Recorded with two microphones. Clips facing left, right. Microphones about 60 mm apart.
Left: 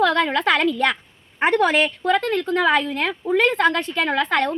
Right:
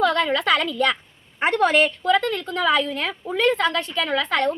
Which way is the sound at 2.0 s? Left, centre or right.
Left.